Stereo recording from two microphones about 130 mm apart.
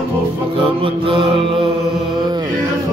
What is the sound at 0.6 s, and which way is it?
Mantra, 40° right (ahead or behind).